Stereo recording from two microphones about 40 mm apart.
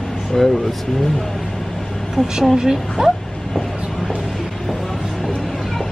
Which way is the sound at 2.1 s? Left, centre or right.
Centre.